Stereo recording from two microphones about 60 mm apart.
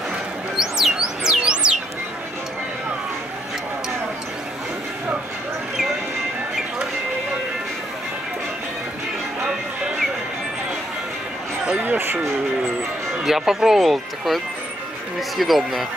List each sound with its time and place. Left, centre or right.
0.6 s music: centre
11.6 s a sound: right
12.0 s music: right
13.2 s speech: centre